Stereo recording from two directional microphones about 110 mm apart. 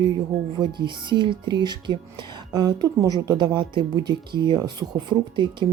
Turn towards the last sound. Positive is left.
turn(degrees=-45)  # may be behind; listen again after turning